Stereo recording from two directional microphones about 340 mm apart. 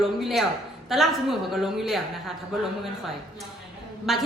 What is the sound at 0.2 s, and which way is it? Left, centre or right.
A woman's voice, centre.